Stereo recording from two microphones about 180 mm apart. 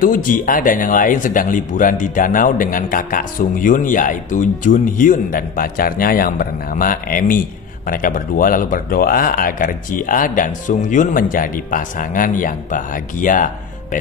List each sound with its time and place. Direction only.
0.0 s speech: 50° left (ahead or behind)